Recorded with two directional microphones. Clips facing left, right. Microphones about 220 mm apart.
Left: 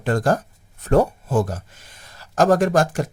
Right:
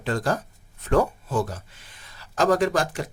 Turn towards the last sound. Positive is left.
turn(degrees=45)  # may be behind; listen again after turning